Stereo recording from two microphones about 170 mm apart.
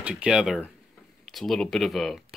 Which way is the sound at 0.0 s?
5° right (ahead or behind).